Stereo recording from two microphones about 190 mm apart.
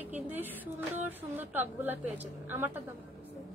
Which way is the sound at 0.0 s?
10° right (ahead or behind).